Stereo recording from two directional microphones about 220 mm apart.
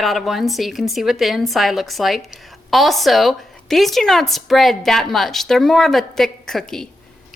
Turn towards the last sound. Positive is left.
turn(degrees=0)  # may be behind; listen again after turning